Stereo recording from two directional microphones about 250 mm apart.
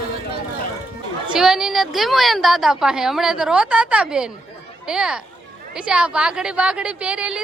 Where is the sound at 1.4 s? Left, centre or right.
Centre.